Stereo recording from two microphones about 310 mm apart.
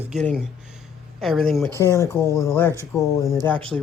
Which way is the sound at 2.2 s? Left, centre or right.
Centre.